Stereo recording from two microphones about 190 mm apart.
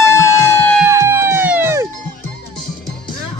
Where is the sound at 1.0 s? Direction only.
15° right (ahead or behind).